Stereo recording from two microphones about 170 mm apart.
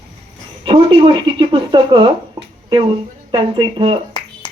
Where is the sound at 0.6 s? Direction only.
30° right (ahead or behind).